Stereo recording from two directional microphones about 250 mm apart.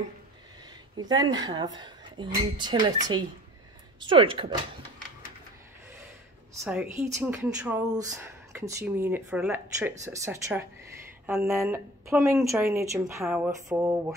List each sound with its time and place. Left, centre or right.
0.9 s speech: centre
4.0 s speech: centre
6.6 s speech: centre